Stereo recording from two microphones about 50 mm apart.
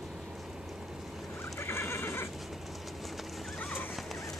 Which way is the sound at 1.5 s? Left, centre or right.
Left.